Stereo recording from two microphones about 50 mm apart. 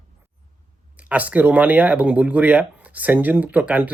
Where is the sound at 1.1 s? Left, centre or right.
Right.